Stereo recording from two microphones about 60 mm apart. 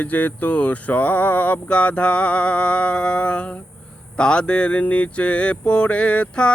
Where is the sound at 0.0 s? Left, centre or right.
Left.